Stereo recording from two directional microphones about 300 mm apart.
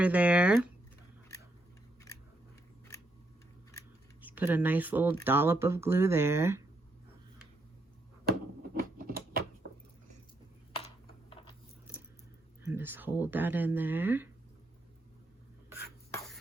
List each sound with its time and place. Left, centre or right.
0.0 s speech: centre
4.3 s speech: centre
8.7 s a sound: right
10.8 s computer keyboard: centre
12.6 s speech: centre